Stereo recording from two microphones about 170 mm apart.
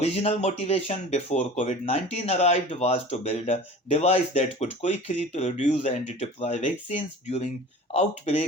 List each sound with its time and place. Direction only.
0.0 s speech: 40° left (ahead or behind)